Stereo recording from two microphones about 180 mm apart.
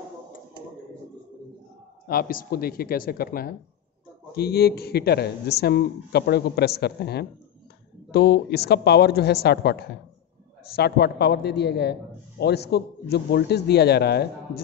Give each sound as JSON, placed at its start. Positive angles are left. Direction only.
{"t": 2.0, "sound": "a man's voice", "side_deg": 55}